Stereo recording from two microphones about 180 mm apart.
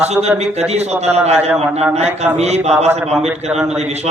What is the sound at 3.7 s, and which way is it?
Speech, 35° right (ahead or behind).